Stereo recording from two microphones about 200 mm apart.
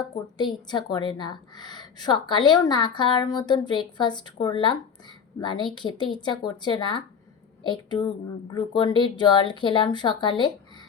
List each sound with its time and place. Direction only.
0.3 s speech: 20° left (ahead or behind)